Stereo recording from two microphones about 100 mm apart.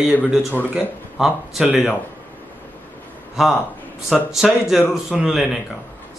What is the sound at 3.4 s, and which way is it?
A man's voice, 5° right (ahead or behind).